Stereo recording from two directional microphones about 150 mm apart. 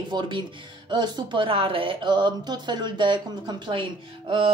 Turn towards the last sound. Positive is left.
turn(degrees=-35)  # may be behind; listen again after turning